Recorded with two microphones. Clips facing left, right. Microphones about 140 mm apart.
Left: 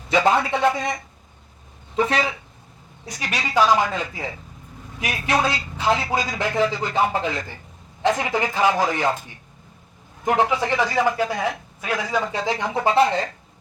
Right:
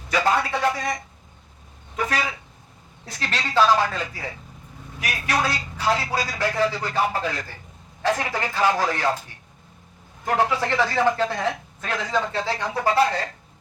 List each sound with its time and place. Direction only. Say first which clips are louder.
0.1 s speech: left 4 dB; 20° left (ahead or behind)
2.0 s speech: left 6 dB; 25° left (ahead or behind)
3.1 s speech: left 1 dB; 15° left (ahead or behind)
10.2 s speech: left 2 dB; 15° left (ahead or behind)